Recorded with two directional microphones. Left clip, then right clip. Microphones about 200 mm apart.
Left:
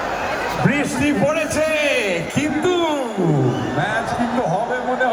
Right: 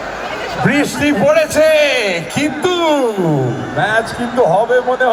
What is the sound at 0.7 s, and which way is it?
A man's voice, 20° right (ahead or behind).